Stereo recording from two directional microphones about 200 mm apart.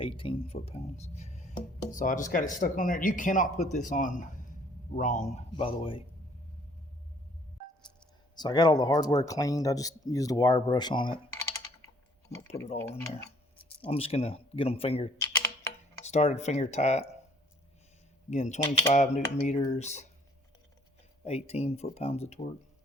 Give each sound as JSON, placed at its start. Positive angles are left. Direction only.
{"t": 0.0, "sound": "speech", "side_deg": 25}
{"t": 8.4, "sound": "speech", "side_deg": 20}
{"t": 13.0, "sound": "speech", "side_deg": 15}
{"t": 13.6, "sound": "speech", "side_deg": 30}
{"t": 18.3, "sound": "speech", "side_deg": 35}
{"t": 21.2, "sound": "speech", "side_deg": 30}